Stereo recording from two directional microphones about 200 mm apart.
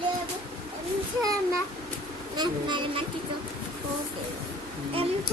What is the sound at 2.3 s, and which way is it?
Speech, 20° right (ahead or behind).